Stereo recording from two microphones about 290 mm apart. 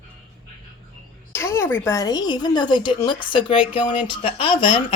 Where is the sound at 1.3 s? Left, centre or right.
Centre.